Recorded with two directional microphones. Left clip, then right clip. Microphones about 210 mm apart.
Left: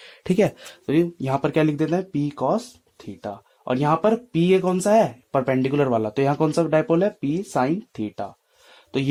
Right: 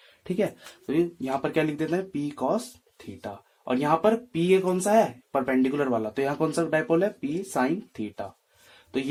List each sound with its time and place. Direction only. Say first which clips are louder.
0.3 s speech: left 7 dB; 45° left (ahead or behind)